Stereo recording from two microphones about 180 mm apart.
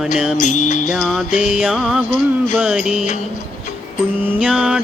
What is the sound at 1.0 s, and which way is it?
Mantra, centre (ahead or behind).